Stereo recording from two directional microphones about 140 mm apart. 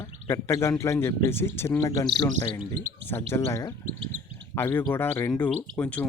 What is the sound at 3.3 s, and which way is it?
Speech, 20° left (ahead or behind).